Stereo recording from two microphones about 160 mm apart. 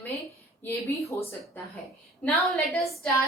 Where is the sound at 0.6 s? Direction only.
20° left (ahead or behind).